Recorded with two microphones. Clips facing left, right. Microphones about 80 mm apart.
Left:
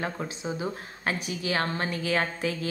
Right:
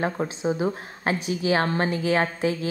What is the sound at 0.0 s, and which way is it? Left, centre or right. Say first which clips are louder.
A woman's voice: right 7 dB; right.